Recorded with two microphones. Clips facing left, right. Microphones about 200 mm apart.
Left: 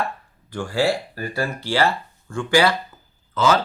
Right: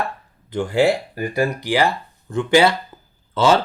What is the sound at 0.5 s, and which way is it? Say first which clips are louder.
Speech: right 4 dB; 20° right (ahead or behind).